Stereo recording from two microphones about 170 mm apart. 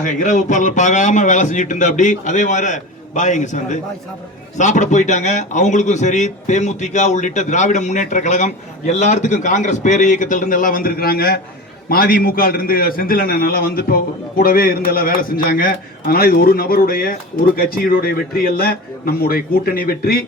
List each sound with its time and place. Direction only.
0.0 s a man's voice: 45° left (ahead or behind)